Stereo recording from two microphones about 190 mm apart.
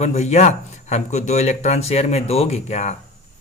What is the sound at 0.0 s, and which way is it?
Speech, 35° left (ahead or behind).